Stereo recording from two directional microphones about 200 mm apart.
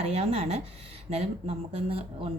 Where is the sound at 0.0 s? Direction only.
30° right (ahead or behind).